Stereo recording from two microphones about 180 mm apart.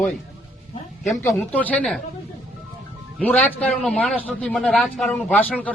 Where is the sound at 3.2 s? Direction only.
10° left (ahead or behind).